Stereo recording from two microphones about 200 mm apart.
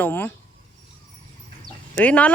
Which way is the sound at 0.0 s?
10° left (ahead or behind).